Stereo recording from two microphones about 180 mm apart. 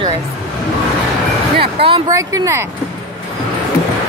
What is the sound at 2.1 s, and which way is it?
Speech, 15° right (ahead or behind).